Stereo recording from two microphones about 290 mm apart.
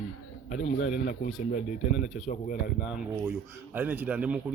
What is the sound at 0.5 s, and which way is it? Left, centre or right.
Speech, left.